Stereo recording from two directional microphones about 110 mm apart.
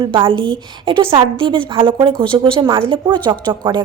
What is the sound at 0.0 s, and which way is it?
Speech, 55° right (ahead or behind).